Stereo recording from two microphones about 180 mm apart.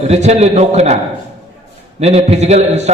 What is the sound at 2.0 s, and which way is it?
Speech, 35° right (ahead or behind).